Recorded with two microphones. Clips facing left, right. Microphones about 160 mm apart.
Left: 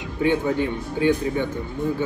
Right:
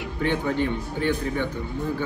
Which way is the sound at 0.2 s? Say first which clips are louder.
Left 3 dB; 15° left (ahead or behind).